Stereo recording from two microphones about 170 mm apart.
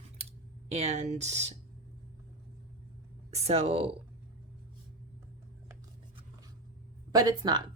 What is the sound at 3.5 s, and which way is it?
Speech, 35° right (ahead or behind).